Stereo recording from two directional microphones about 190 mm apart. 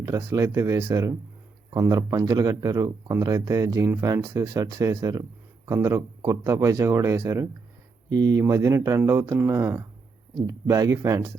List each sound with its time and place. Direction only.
0.0 s speech: 15° right (ahead or behind)